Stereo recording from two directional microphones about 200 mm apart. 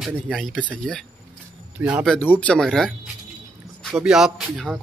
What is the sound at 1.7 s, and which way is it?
Speech, 5° right (ahead or behind).